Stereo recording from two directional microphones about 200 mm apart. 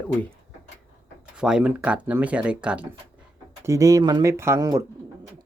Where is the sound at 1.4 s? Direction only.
5° right (ahead or behind).